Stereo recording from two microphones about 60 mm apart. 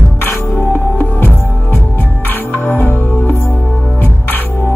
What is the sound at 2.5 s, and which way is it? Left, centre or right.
Music, left.